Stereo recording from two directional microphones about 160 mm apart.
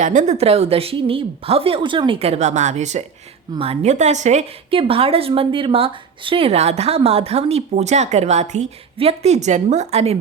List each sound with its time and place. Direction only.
0.0 s a woman's voice: 50° right (ahead or behind)